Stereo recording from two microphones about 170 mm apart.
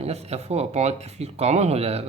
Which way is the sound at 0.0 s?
40° right (ahead or behind).